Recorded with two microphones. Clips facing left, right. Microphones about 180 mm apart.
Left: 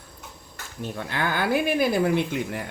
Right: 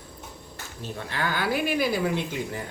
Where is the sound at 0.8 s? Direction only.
55° left (ahead or behind).